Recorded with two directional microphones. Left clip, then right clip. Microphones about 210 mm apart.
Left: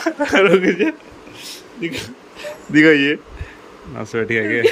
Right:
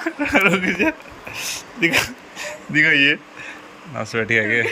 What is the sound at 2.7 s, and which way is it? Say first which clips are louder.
Speech: left 2 dB; 20° left (ahead or behind).